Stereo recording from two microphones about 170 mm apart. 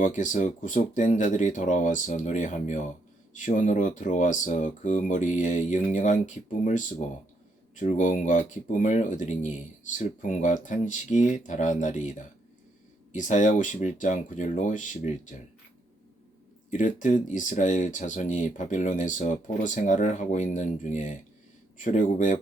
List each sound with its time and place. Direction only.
0.0 s speech: 45° left (ahead or behind)
13.1 s speech: 45° left (ahead or behind)
16.7 s speech: 45° left (ahead or behind)